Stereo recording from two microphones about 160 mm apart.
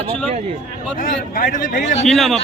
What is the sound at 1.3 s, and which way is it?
Speech, 60° left (ahead or behind).